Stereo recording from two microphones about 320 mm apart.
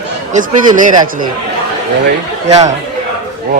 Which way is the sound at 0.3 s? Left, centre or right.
Centre.